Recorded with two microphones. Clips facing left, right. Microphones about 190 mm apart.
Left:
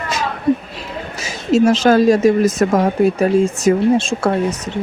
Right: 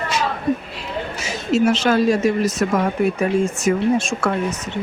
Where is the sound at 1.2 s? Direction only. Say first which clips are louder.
Left 4 dB; 40° left (ahead or behind).